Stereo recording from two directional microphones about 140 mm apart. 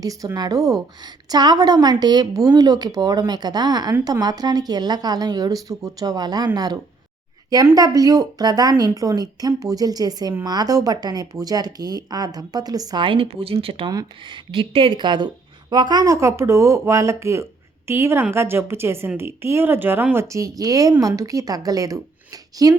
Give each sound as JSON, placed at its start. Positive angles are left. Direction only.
{"t": 0.0, "sound": "a woman's voice", "side_deg": -25}
{"t": 13.9, "sound": "a woman's voice", "side_deg": -30}